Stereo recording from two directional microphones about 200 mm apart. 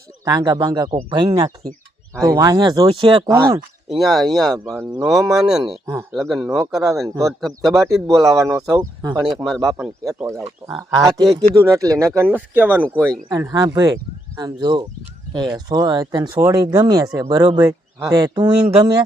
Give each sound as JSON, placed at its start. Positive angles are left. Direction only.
{"t": 0.3, "sound": "speech", "side_deg": -20}
{"t": 3.8, "sound": "speech", "side_deg": 0}
{"t": 5.8, "sound": "speech", "side_deg": -15}
{"t": 6.1, "sound": "speech", "side_deg": 0}
{"t": 6.4, "sound": "speech", "side_deg": -15}
{"t": 7.4, "sound": "speech", "side_deg": 0}
{"t": 7.9, "sound": "speech", "side_deg": -15}
{"t": 9.3, "sound": "speech", "side_deg": 0}
{"t": 10.2, "sound": "speech", "side_deg": -15}